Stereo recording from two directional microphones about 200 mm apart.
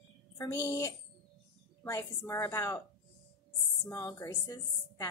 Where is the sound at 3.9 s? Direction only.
15° left (ahead or behind).